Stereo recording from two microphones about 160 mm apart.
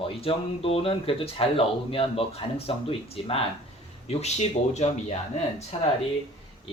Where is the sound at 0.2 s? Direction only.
35° left (ahead or behind).